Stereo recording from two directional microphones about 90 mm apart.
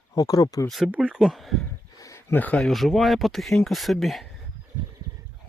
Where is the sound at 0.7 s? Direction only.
Centre (ahead or behind).